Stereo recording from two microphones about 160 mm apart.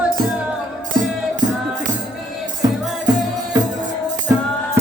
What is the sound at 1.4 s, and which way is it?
Music, 25° right (ahead or behind).